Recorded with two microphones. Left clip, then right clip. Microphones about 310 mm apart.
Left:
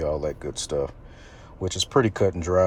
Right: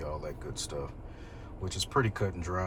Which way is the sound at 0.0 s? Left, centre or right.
Left.